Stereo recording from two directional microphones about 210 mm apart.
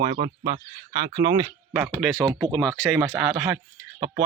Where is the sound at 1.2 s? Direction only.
20° right (ahead or behind).